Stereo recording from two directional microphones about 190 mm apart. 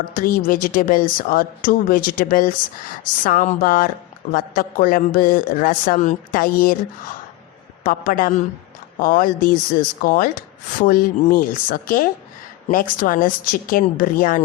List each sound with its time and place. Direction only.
0.1 s speech: 50° left (ahead or behind)